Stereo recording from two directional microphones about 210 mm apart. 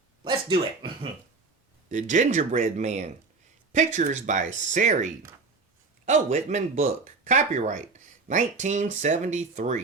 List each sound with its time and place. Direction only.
0.3 s speech: 20° right (ahead or behind)
1.9 s speech: 35° right (ahead or behind)